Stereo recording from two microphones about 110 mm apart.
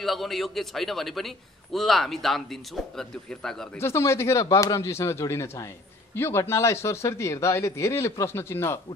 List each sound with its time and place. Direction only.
0.0 s a man's voice: centre (ahead or behind)
3.7 s speech: 25° left (ahead or behind)